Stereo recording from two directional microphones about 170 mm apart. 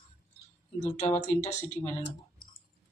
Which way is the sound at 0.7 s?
45° left (ahead or behind).